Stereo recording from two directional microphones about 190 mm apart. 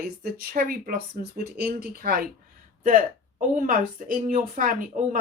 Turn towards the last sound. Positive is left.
turn(degrees=-45)  # may be behind; listen again after turning